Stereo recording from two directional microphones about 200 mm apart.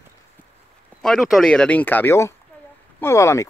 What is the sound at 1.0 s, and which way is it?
Speech, centre (ahead or behind).